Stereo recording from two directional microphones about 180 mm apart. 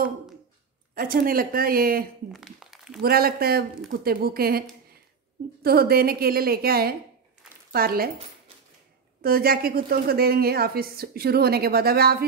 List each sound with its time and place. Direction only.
0.9 s speech: 50° right (ahead or behind)
2.3 s speech: centre (ahead or behind)
3.0 s speech: 55° right (ahead or behind)
9.2 s speech: 55° right (ahead or behind)